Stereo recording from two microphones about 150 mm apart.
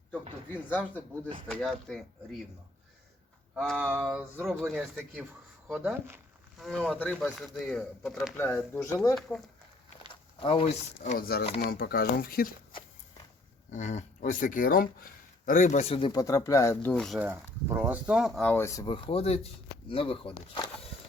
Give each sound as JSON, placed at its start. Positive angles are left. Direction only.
{"t": 0.5, "sound": "speech", "side_deg": 10}
{"t": 3.5, "sound": "speech", "side_deg": 0}
{"t": 6.6, "sound": "speech", "side_deg": 0}
{"t": 8.4, "sound": "speech", "side_deg": 15}
{"t": 10.4, "sound": "speech", "side_deg": 40}
{"t": 11.2, "sound": "speech", "side_deg": 90}
{"t": 13.7, "sound": "speech", "side_deg": 55}
{"t": 16.2, "sound": "speech", "side_deg": 20}
{"t": 16.9, "sound": "speech", "side_deg": 0}
{"t": 17.2, "sound": "speech", "side_deg": -15}
{"t": 18.4, "sound": "speech", "side_deg": 15}
{"t": 18.9, "sound": "speech", "side_deg": 35}